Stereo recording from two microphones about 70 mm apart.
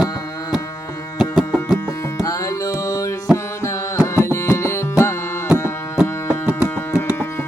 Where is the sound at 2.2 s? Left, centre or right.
Left.